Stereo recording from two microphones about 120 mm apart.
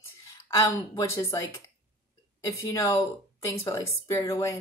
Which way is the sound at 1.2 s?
25° left (ahead or behind).